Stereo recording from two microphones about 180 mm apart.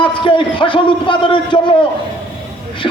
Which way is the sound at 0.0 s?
25° left (ahead or behind).